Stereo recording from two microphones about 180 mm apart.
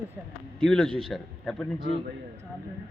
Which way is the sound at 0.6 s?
5° left (ahead or behind).